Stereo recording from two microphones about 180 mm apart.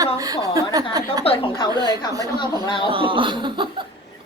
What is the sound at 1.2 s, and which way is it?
Speech, 30° left (ahead or behind).